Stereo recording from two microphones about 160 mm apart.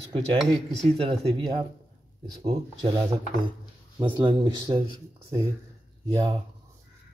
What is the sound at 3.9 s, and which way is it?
Speech, 30° right (ahead or behind).